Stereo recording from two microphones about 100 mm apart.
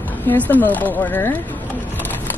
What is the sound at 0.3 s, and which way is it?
Speech, 20° left (ahead or behind).